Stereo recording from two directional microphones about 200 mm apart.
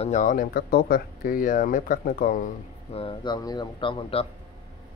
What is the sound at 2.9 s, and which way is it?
Speech, 25° left (ahead or behind).